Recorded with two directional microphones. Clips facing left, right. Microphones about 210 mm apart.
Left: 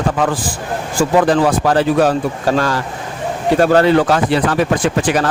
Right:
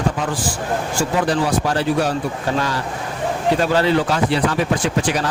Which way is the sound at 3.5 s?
50° left (ahead or behind).